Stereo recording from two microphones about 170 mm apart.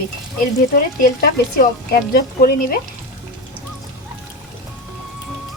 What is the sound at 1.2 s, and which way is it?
A woman's voice, 60° left (ahead or behind).